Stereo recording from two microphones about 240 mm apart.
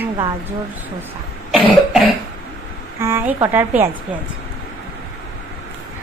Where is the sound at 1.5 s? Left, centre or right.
Centre.